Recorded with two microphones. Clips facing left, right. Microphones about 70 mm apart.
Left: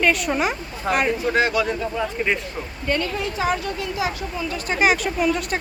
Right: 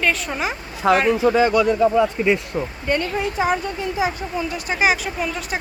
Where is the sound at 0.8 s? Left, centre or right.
Right.